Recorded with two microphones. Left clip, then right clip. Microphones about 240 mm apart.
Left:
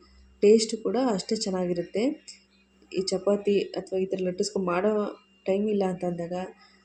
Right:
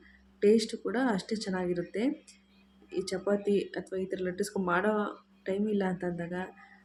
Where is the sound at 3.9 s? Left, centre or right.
Centre.